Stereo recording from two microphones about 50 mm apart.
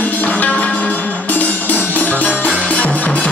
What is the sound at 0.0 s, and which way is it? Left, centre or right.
Music, left.